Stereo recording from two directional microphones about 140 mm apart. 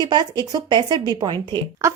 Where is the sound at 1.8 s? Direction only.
20° right (ahead or behind).